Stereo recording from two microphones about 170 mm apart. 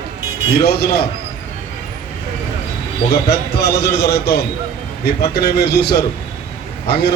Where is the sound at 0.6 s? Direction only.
70° left (ahead or behind).